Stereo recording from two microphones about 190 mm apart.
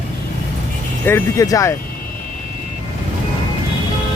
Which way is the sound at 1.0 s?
10° left (ahead or behind).